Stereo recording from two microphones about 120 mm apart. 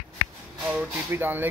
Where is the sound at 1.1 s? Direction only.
15° right (ahead or behind).